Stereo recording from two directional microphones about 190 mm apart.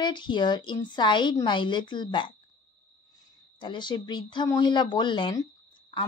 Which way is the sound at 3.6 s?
25° left (ahead or behind).